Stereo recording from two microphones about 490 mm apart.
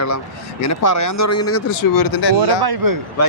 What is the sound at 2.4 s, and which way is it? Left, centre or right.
Speech, right.